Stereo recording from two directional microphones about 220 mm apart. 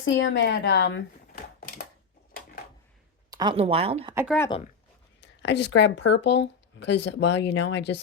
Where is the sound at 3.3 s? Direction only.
20° right (ahead or behind).